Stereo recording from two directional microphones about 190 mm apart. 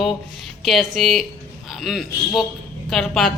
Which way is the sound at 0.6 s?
Centre (ahead or behind).